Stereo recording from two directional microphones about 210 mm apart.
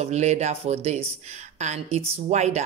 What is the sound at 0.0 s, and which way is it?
Speech, 35° right (ahead or behind).